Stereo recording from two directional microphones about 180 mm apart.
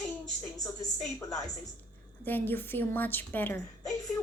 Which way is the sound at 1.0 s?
15° left (ahead or behind).